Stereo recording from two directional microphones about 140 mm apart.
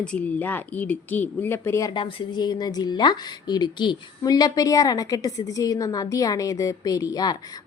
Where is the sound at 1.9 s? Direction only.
35° left (ahead or behind).